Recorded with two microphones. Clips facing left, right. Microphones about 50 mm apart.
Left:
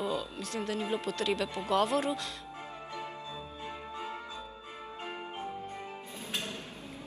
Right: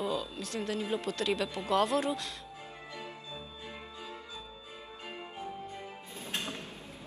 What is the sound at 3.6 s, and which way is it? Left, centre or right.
Music, left.